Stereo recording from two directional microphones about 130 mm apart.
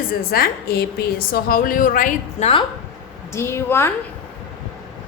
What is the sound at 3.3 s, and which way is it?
Speech, 20° left (ahead or behind).